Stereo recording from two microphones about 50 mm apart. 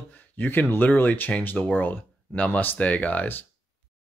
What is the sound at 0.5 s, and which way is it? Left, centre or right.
Speech, left.